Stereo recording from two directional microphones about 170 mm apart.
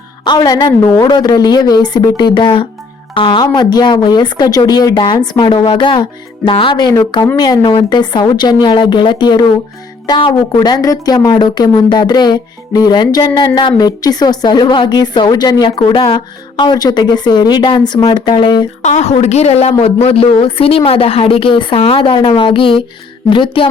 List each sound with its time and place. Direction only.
0.3 s a woman's voice: 25° left (ahead or behind)
7.6 s a woman's voice: 30° left (ahead or behind)
18.8 s a woman's voice: 45° left (ahead or behind)